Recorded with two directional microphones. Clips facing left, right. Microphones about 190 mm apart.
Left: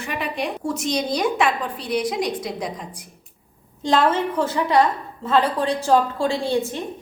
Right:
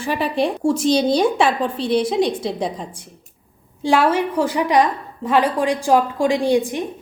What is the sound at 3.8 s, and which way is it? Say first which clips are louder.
A woman's voice: right 2 dB; 10° right (ahead or behind).